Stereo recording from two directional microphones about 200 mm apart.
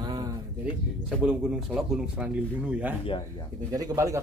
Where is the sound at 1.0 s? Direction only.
5° right (ahead or behind).